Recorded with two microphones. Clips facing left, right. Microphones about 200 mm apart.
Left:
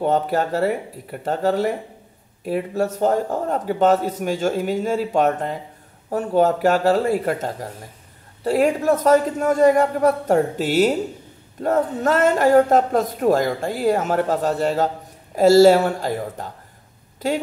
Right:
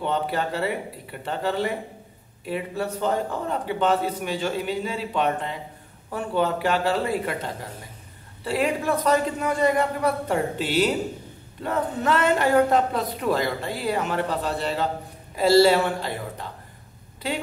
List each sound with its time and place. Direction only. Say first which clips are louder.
0.0 s speech: left 6 dB; 45° left (ahead or behind)